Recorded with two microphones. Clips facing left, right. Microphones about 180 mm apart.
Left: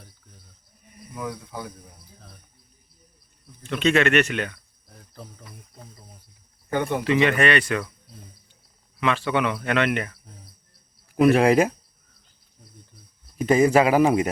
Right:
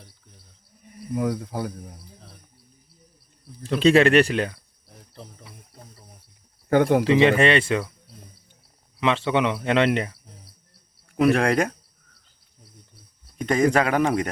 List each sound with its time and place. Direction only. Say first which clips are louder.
1.1 s speech: right 7 dB; 50° right (ahead or behind)
3.6 s speech: right 4 dB; 35° right (ahead or behind)
6.7 s speech: right 7 dB; 80° right
7.0 s speech: right 3 dB; 25° right (ahead or behind)
9.0 s speech: right 2 dB; 25° right (ahead or behind)
11.1 s speech: left 3 dB; 5° left (ahead or behind)
13.4 s a man's voice: left 3 dB; 5° left (ahead or behind)